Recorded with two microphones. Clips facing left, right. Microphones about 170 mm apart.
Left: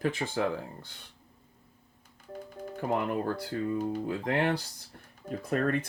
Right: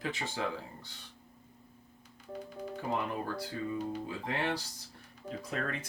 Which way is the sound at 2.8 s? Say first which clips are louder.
Left 6 dB; 50° left (ahead or behind).